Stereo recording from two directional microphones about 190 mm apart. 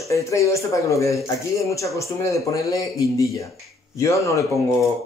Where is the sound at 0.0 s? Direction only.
15° left (ahead or behind).